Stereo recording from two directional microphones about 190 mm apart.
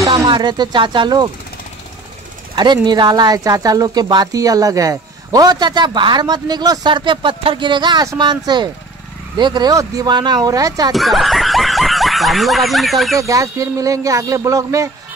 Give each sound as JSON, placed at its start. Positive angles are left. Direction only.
{"t": 0.0, "sound": "speech", "side_deg": -20}
{"t": 2.5, "sound": "speech", "side_deg": -20}
{"t": 10.9, "sound": "speech", "side_deg": 0}
{"t": 13.2, "sound": "speech", "side_deg": -15}